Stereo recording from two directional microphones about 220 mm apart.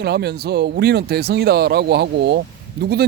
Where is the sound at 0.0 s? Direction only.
50° right (ahead or behind).